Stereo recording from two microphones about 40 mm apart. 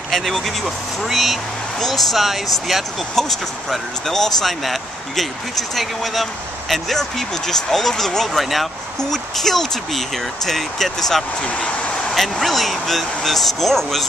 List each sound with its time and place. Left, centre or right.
0.1 s speech: centre
3.2 s speech: centre
11.4 s speech: left
12.1 s speech: centre